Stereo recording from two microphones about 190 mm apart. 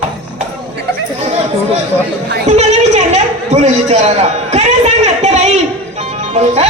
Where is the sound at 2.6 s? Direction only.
35° right (ahead or behind).